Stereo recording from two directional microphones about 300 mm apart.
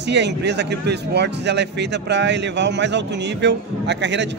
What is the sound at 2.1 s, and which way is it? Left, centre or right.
Speech, right.